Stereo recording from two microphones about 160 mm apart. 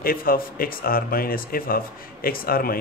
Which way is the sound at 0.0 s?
65° left (ahead or behind).